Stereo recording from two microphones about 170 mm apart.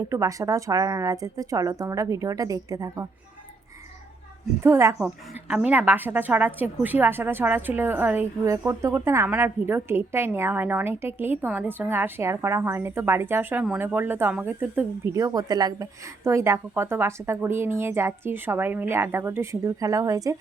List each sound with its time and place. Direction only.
0.1 s a woman's voice: 20° right (ahead or behind)
4.6 s a woman's voice: 15° right (ahead or behind)